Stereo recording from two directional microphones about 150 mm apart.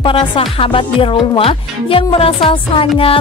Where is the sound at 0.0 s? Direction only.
35° left (ahead or behind).